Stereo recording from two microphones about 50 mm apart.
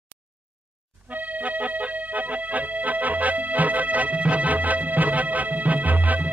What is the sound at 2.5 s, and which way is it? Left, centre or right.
Music, right.